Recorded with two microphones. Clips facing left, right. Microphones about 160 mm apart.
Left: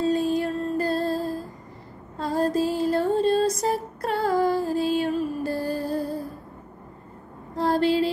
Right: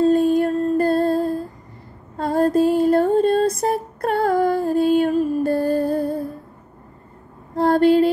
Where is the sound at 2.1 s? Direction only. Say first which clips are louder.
Right 6 dB; 55° right (ahead or behind).